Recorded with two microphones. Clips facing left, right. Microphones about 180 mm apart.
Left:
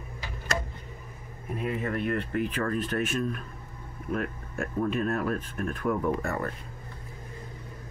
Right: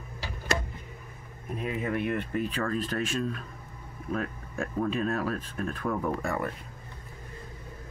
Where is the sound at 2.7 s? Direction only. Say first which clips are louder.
Left 1 dB; 35° right (ahead or behind).